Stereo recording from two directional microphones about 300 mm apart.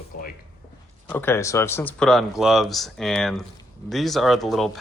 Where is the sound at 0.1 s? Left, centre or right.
Left.